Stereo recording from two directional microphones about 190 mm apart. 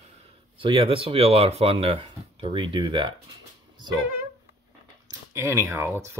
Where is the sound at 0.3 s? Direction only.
25° right (ahead or behind).